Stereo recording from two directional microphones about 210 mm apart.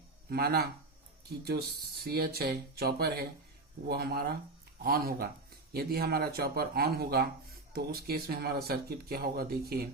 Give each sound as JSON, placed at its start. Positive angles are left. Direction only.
{"t": 0.3, "sound": "speech", "side_deg": -45}
{"t": 2.0, "sound": "speech", "side_deg": -50}